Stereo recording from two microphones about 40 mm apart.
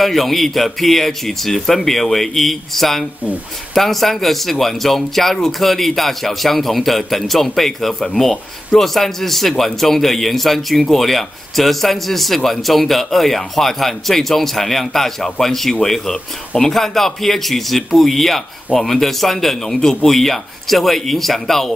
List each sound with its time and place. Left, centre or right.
0.0 s speech: centre